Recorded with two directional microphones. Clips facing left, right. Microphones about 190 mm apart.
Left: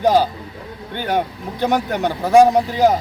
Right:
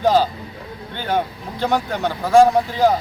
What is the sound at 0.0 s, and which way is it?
Speech, 15° left (ahead or behind).